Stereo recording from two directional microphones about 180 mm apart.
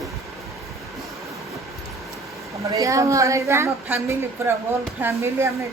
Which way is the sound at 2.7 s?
20° right (ahead or behind).